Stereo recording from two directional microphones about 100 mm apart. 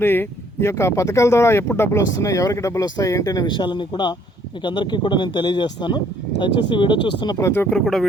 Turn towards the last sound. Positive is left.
turn(degrees=20)  # may be behind; listen again after turning